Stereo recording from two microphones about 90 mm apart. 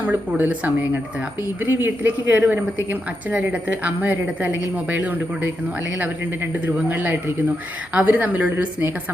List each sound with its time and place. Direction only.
0.0 s a woman's voice: 20° right (ahead or behind)